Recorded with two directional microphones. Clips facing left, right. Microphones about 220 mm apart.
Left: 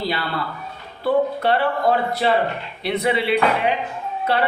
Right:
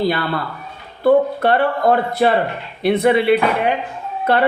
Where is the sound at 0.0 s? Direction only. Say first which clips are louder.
Right 6 dB; 50° right (ahead or behind).